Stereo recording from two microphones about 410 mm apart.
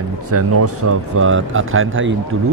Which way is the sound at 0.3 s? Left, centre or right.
Right.